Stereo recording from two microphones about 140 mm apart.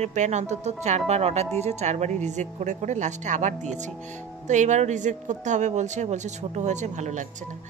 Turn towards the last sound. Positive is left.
turn(degrees=-60)  # may be behind; listen again after turning